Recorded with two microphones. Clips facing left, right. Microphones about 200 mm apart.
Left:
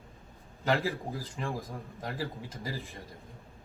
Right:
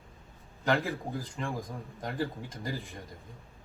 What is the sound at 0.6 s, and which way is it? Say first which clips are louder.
A man's voice: even; centre (ahead or behind).